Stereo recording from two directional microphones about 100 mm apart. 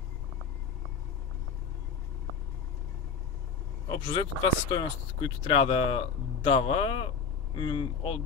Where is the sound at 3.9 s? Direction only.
45° left (ahead or behind).